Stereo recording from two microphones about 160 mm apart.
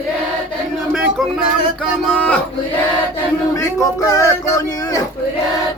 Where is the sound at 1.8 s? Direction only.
5° left (ahead or behind).